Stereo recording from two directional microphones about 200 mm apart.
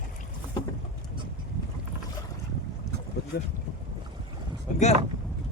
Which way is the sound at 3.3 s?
50° left (ahead or behind).